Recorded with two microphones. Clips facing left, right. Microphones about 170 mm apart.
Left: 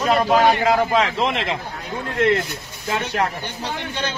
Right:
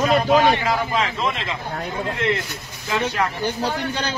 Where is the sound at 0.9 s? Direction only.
65° left (ahead or behind).